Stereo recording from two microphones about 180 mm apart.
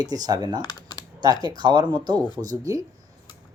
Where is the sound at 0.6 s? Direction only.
20° left (ahead or behind).